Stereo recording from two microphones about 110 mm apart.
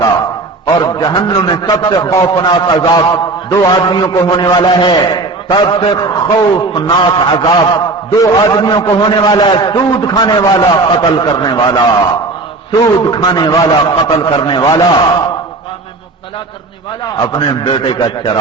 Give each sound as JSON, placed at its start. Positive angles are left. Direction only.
{"t": 0.8, "sound": "a man's voice", "side_deg": 40}
{"t": 2.4, "sound": "a man's voice", "side_deg": 40}
{"t": 6.0, "sound": "a man's voice", "side_deg": 40}
{"t": 12.8, "sound": "a man's voice", "side_deg": 40}
{"t": 17.2, "sound": "a man's voice", "side_deg": 45}